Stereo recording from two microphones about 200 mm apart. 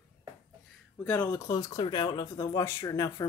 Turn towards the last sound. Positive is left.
turn(degrees=15)  # may be behind; listen again after turning